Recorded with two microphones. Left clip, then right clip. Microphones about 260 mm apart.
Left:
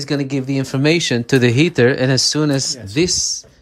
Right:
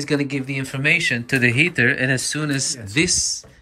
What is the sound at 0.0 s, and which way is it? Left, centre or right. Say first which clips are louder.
Speech: left 2 dB; centre.